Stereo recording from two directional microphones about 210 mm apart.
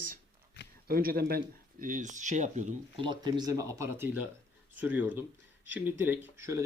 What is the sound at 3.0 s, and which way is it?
Speech, 20° right (ahead or behind).